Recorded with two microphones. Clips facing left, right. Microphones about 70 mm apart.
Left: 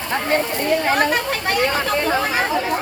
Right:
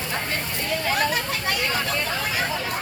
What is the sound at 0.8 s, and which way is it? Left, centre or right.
Chatter, left.